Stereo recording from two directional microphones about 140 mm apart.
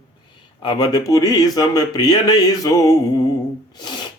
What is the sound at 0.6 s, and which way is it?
Speech, 30° left (ahead or behind).